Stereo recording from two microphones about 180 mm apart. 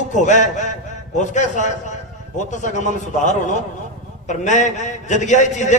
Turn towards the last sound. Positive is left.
turn(degrees=40)  # may be behind; listen again after turning